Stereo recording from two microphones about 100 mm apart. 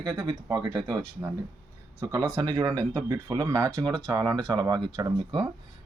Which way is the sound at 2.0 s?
35° right (ahead or behind).